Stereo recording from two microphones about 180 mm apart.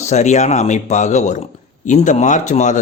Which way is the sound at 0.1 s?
40° left (ahead or behind).